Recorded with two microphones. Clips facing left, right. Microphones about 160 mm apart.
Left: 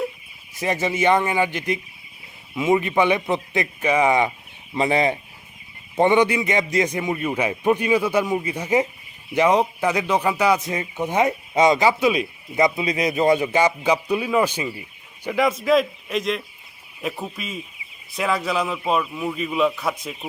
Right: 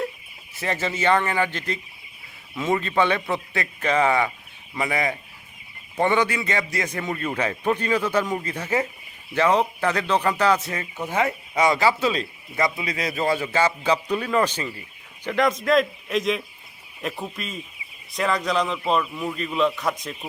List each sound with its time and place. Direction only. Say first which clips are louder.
0.5 s a man's voice: left 4 dB; 15° left (ahead or behind)